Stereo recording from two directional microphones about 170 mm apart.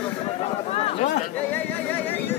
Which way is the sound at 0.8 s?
40° left (ahead or behind).